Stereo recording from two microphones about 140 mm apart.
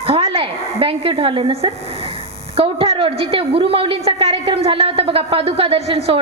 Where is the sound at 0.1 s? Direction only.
40° right (ahead or behind).